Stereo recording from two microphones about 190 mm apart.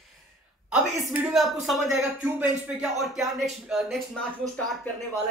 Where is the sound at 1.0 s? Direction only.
15° right (ahead or behind).